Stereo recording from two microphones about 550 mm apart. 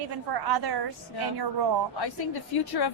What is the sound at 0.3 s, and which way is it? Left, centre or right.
Speech, right.